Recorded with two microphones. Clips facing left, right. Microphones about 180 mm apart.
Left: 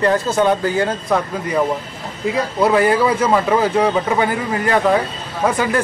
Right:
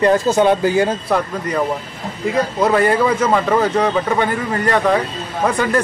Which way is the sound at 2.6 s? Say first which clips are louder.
Left 1 dB; 5° left (ahead or behind).